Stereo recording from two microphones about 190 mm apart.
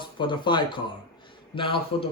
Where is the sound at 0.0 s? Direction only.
25° left (ahead or behind).